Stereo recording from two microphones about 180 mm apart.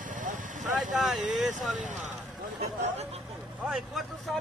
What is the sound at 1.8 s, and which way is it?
Speech, 45° right (ahead or behind).